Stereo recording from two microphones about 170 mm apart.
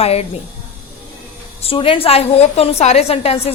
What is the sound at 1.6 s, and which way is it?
A woman's voice, 35° left (ahead or behind).